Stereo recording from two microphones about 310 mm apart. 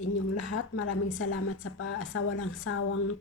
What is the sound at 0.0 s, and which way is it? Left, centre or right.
A woman's voice, left.